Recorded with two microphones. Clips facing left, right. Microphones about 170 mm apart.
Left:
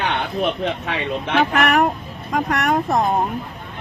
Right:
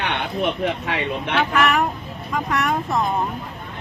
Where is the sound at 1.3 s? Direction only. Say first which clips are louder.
Left 3 dB; 45° left (ahead or behind).